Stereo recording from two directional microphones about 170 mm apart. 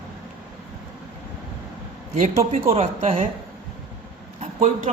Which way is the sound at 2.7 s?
35° right (ahead or behind).